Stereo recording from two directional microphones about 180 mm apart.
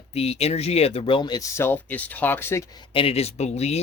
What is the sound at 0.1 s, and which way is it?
Speech, 35° left (ahead or behind).